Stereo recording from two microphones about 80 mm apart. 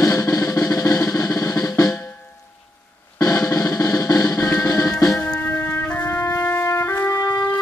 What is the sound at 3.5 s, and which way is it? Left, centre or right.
Drum, left.